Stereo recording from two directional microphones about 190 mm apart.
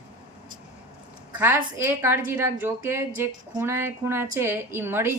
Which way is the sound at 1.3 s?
10° right (ahead or behind).